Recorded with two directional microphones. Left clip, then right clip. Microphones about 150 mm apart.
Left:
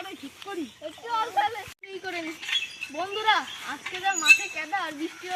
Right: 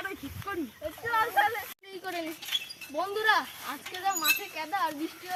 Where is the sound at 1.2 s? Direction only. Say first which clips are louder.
Even; centre (ahead or behind).